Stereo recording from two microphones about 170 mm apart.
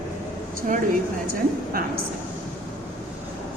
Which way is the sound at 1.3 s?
60° right (ahead or behind).